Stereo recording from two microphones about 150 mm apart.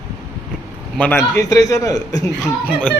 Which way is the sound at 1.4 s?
25° left (ahead or behind).